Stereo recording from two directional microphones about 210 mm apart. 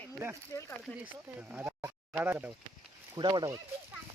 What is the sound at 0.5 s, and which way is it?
Speech, 15° left (ahead or behind).